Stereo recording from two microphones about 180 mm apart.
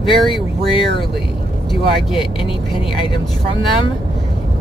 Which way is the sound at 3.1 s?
25° left (ahead or behind).